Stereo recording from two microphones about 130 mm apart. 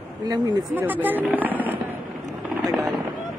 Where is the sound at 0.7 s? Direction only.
15° right (ahead or behind).